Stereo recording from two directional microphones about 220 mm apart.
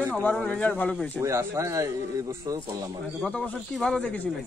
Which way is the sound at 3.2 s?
5° left (ahead or behind).